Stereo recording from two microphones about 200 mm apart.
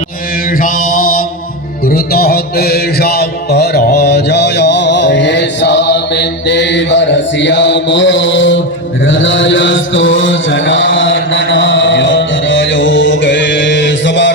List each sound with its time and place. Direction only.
0.6 s mantra: 45° left (ahead or behind); by 14.3 s 65° left (ahead or behind)